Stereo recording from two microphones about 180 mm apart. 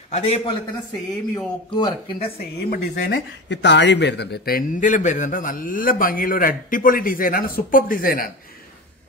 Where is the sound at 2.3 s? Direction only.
65° left (ahead or behind).